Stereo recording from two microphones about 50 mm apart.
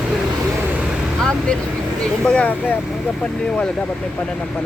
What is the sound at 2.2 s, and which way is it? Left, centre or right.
Speech, left.